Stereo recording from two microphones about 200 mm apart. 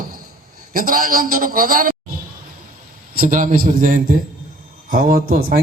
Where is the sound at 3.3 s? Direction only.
40° right (ahead or behind).